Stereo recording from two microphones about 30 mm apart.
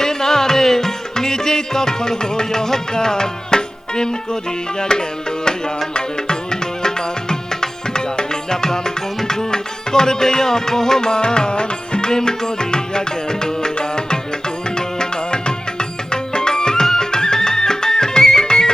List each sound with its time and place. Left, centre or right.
0.0 s music: centre
13.7 s tabla: left
14.8 s music: left